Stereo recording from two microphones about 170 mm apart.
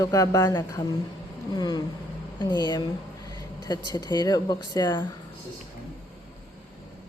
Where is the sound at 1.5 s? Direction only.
25° left (ahead or behind).